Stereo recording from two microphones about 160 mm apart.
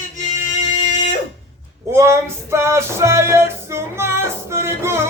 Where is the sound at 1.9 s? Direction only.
15° right (ahead or behind).